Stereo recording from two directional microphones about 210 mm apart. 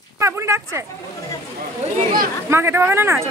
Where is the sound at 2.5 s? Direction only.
10° right (ahead or behind).